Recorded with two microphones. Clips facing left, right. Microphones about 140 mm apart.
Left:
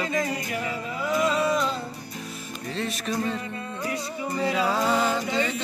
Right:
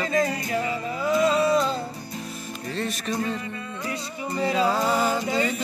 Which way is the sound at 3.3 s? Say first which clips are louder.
Even; 35° left (ahead or behind).